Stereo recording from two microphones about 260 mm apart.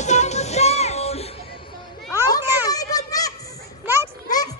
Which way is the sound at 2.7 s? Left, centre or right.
Centre.